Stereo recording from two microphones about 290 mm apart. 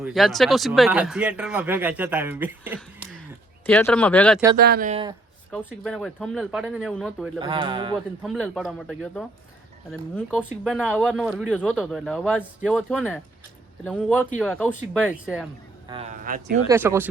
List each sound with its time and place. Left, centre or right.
0.0 s speech: centre
4.5 s speech: right
5.5 s speech: centre
7.3 s speech: centre
7.9 s speech: centre
15.9 s speech: right
16.6 s speech: centre